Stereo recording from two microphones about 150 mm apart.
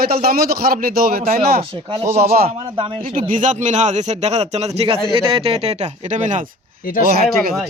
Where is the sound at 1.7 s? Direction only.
35° right (ahead or behind).